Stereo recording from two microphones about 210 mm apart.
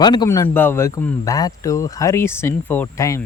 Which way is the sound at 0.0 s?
20° left (ahead or behind).